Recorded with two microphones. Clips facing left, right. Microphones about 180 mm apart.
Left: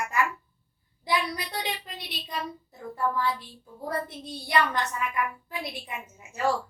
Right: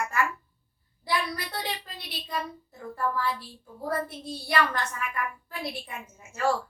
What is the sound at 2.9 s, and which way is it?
Speech, 20° left (ahead or behind).